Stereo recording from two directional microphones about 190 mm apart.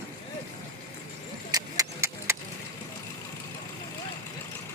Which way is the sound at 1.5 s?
15° right (ahead or behind).